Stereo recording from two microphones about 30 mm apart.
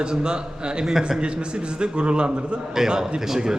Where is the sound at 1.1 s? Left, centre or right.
Right.